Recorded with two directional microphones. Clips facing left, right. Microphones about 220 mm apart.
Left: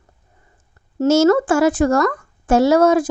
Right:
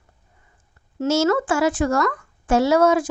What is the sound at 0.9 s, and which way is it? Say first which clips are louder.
Speech: left 6 dB; 45° left (ahead or behind).